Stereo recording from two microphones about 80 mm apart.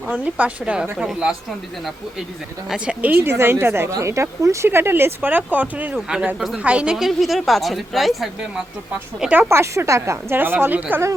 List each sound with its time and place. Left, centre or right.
0.1 s a woman's voice: centre
2.6 s a woman's voice: centre
3.1 s a woman's voice: right; by 8.3 s centre
9.5 s a woman's voice: right
10.3 s speech: right